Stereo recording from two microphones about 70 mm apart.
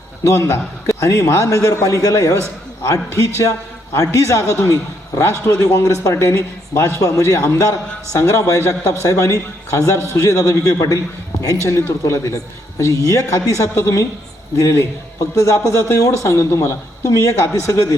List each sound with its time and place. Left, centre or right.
0.3 s a man's voice: left